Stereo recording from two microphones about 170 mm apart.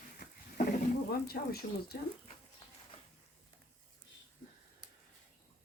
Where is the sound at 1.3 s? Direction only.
65° left (ahead or behind).